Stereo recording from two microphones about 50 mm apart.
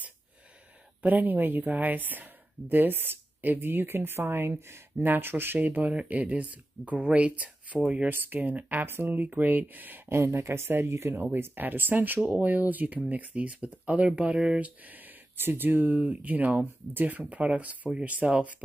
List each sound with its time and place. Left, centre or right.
1.0 s speech: right
4.9 s speech: right
5.6 s speech: right
8.1 s speech: right
9.2 s speech: right
10.0 s speech: right